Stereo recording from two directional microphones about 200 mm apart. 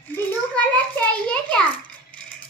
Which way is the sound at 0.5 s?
5° left (ahead or behind).